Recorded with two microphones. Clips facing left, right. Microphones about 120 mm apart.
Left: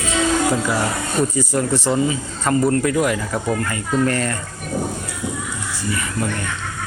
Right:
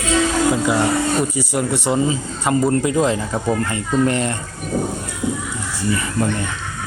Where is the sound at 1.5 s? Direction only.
15° right (ahead or behind).